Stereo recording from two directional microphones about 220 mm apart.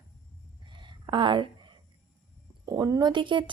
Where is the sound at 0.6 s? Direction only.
20° right (ahead or behind).